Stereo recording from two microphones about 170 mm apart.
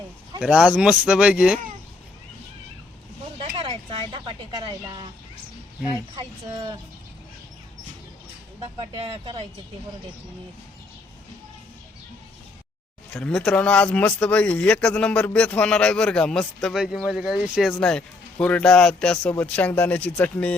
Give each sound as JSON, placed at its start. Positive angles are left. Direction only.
{"t": 0.3, "sound": "speech", "side_deg": -5}
{"t": 3.3, "sound": "speech", "side_deg": -30}
{"t": 6.1, "sound": "speech", "side_deg": -25}
{"t": 8.6, "sound": "speech", "side_deg": -30}
{"t": 13.1, "sound": "speech", "side_deg": 5}